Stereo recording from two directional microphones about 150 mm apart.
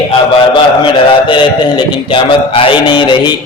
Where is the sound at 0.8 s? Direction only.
35° left (ahead or behind).